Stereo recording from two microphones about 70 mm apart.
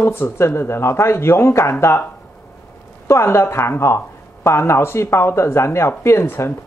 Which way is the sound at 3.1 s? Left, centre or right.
Left.